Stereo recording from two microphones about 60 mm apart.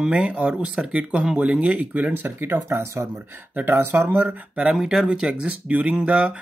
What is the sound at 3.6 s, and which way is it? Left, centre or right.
Speech, right.